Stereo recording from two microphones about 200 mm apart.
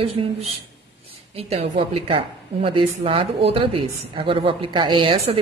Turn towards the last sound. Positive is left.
turn(degrees=-30)  # may be behind; listen again after turning